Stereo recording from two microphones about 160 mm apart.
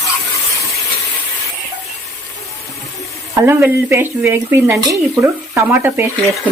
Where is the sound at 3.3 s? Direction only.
15° right (ahead or behind).